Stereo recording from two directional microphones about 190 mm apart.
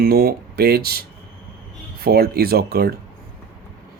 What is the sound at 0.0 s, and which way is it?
Speech, 55° right (ahead or behind).